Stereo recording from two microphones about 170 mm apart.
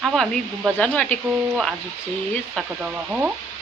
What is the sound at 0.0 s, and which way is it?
Speech, centre (ahead or behind).